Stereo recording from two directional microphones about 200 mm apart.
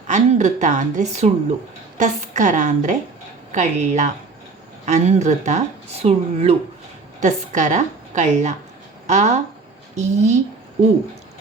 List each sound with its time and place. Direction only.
0.1 s speech: 35° right (ahead or behind)